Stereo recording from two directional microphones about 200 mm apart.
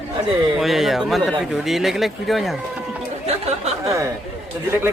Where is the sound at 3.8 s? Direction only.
15° right (ahead or behind).